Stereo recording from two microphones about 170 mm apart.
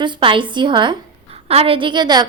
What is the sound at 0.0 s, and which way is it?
A woman's voice, 30° right (ahead or behind).